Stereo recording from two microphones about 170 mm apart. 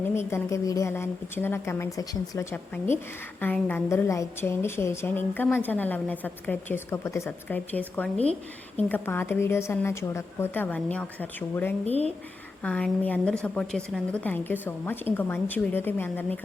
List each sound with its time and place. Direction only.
0.1 s a woman's voice: 15° left (ahead or behind)
8.2 s a woman's voice: 40° right (ahead or behind)
8.9 s a woman's voice: 10° left (ahead or behind)